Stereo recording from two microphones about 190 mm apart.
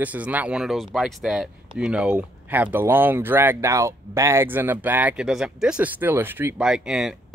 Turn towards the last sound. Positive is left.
turn(degrees=-5)  # may be behind; listen again after turning